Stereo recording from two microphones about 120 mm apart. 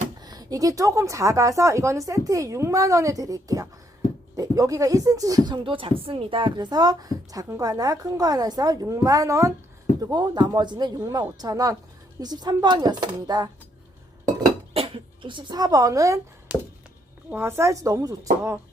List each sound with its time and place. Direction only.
0.2 s a woman's voice: 35° right (ahead or behind)
5.6 s a woman's voice: 45° right (ahead or behind)
14.7 s speech: 50° right (ahead or behind); by 16.2 s 25° right (ahead or behind)
16.5 s a sound: 15° right (ahead or behind)
17.3 s a woman's voice: 20° right (ahead or behind)